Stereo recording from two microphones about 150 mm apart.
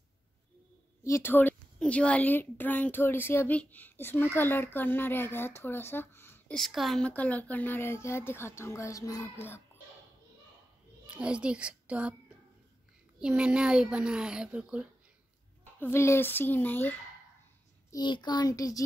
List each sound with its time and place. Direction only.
1.0 s a woman's voice: 15° left (ahead or behind)
6.5 s a woman's voice: centre (ahead or behind); by 9.6 s 20° left (ahead or behind)
11.1 s a child's voice: 5° right (ahead or behind)
13.2 s speech: 5° right (ahead or behind)
15.8 s a woman's voice: 15° left (ahead or behind)
17.9 s a child's voice: 30° left (ahead or behind)